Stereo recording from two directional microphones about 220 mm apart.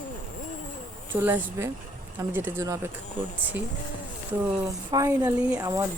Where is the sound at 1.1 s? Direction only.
10° right (ahead or behind).